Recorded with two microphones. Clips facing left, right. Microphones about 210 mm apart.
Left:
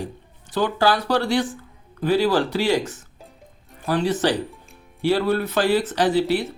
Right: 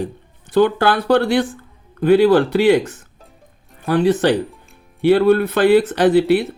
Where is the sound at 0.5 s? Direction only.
60° right (ahead or behind).